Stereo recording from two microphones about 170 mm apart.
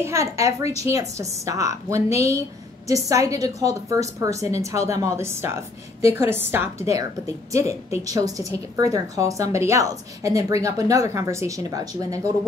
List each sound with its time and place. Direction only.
0.0 s a woman's voice: 15° right (ahead or behind)